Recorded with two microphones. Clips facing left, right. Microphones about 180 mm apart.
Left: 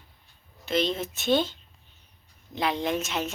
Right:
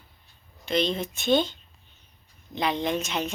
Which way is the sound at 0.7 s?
5° left (ahead or behind).